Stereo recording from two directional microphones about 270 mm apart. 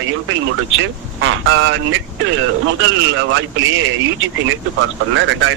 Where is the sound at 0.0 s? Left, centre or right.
Right.